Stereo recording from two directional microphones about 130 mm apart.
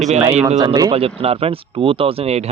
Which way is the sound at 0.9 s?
50° right (ahead or behind).